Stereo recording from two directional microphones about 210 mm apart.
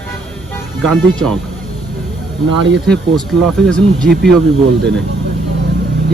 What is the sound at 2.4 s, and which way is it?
Speech, 60° right (ahead or behind).